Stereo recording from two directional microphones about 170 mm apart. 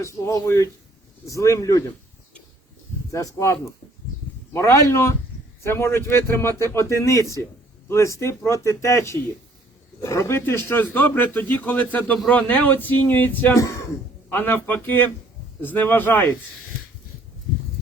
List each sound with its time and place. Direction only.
0.0 s a man's voice: 20° left (ahead or behind)
3.1 s a man's voice: 20° left (ahead or behind)